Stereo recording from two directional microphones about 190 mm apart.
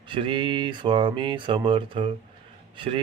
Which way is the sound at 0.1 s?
25° right (ahead or behind).